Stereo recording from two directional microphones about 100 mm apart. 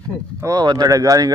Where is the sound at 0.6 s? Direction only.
50° right (ahead or behind).